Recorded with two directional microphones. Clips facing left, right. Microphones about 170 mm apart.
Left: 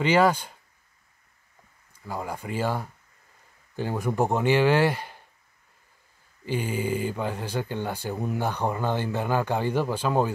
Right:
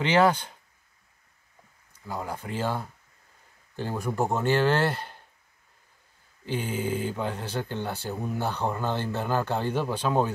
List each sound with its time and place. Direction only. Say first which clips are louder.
0.0 s speech: left 1 dB; 10° left (ahead or behind)
2.0 s speech: left 1 dB; 10° left (ahead or behind)
6.4 s speech: left 2 dB; 10° left (ahead or behind)